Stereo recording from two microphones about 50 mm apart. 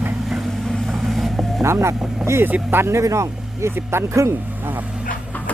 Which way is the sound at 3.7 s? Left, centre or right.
Right.